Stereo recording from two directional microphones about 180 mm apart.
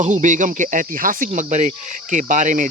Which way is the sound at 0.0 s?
45° right (ahead or behind).